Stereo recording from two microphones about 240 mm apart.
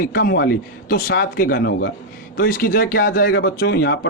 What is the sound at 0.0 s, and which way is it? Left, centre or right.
A man's voice, left.